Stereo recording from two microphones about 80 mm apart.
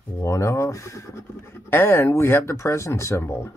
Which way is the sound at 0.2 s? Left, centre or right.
Left.